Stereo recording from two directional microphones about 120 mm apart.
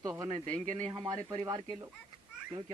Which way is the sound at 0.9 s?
40° right (ahead or behind).